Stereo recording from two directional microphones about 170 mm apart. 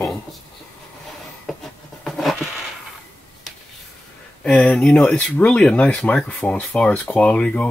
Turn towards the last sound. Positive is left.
turn(degrees=5)  # may be behind; listen again after turning